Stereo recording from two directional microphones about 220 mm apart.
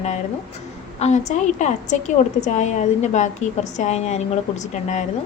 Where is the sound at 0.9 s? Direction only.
30° left (ahead or behind).